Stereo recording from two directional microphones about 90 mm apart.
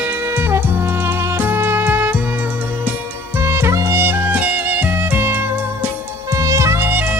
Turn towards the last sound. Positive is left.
turn(degrees=-20)  # may be behind; listen again after turning